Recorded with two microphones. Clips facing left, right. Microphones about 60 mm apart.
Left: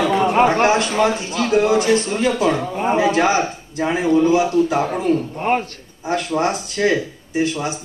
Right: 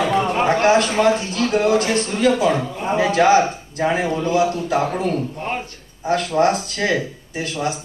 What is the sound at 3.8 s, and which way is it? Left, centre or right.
Speech, right.